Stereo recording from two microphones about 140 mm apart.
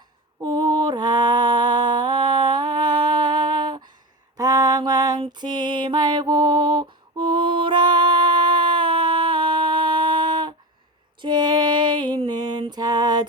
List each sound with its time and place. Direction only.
0.4 s mantra: 30° right (ahead or behind)
11.2 s music: 30° right (ahead or behind)